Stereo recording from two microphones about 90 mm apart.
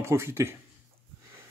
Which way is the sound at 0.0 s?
30° right (ahead or behind).